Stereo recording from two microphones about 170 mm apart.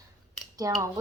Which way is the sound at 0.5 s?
20° right (ahead or behind).